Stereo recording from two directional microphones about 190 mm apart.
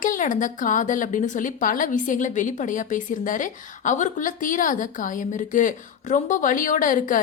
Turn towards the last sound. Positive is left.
turn(degrees=45)  # may be behind; listen again after turning